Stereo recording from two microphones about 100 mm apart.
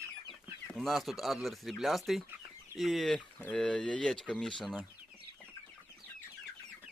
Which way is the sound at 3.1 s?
10° left (ahead or behind).